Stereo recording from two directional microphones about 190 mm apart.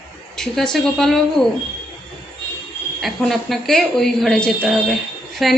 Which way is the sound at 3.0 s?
Centre (ahead or behind).